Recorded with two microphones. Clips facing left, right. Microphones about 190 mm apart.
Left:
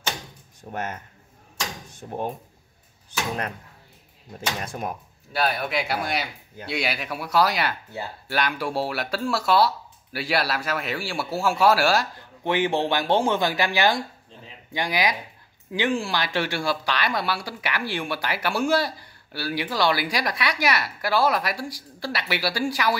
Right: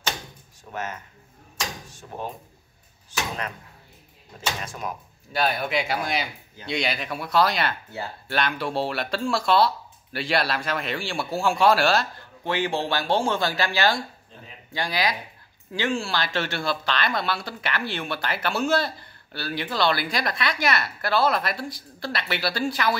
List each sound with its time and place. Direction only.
0.7 s speech: 55° left (ahead or behind)
4.6 s speech: 55° left (ahead or behind)
5.3 s speech: centre (ahead or behind)